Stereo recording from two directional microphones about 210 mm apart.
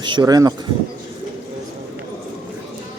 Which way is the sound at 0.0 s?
20° right (ahead or behind).